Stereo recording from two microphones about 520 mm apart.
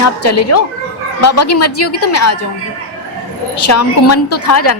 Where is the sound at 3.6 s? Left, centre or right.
Left.